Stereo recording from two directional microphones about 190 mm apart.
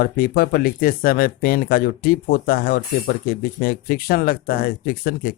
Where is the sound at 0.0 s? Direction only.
50° left (ahead or behind).